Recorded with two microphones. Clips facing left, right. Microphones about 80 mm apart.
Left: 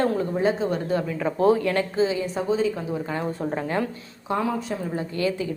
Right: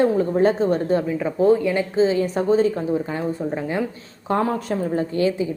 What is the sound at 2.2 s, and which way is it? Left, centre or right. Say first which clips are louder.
Speech: right 6 dB; right.